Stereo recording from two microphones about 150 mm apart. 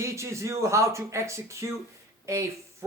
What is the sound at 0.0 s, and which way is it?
Speech, 20° right (ahead or behind).